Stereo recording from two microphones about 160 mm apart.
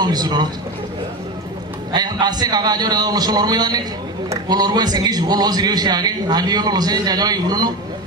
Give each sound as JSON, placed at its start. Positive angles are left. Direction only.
{"t": 0.0, "sound": "a man's voice", "side_deg": -25}
{"t": 1.9, "sound": "a man's voice", "side_deg": -25}